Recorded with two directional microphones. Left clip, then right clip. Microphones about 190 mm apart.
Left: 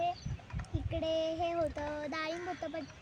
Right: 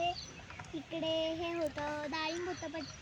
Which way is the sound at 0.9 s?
55° left (ahead or behind).